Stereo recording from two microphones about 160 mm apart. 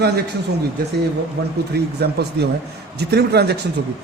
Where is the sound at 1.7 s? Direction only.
90° right.